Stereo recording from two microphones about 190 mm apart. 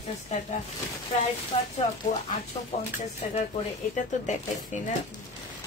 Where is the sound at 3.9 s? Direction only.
40° left (ahead or behind).